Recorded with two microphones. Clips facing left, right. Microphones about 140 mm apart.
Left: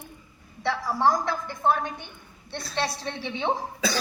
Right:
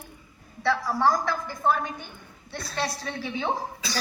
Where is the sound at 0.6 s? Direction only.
20° left (ahead or behind).